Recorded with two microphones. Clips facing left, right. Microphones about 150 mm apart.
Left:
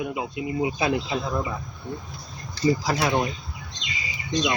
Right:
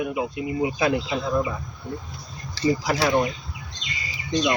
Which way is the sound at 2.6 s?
90° right.